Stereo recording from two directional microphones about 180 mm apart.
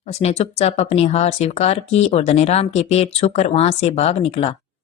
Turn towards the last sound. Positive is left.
turn(degrees=35)  # may be behind; listen again after turning